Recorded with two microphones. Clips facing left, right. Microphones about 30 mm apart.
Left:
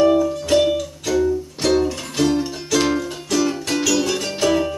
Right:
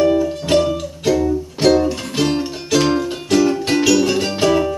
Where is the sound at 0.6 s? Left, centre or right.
Centre.